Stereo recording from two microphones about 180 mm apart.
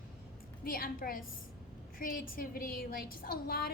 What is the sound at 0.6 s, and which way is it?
A woman's voice, 55° left (ahead or behind).